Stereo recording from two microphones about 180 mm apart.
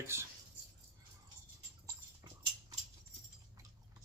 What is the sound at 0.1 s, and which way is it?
Speech, 15° right (ahead or behind).